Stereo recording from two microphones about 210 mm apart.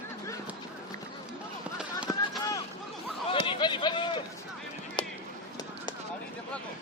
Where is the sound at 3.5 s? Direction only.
20° left (ahead or behind).